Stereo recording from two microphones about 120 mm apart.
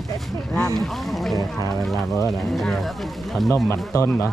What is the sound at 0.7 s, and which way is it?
Speech, centre (ahead or behind).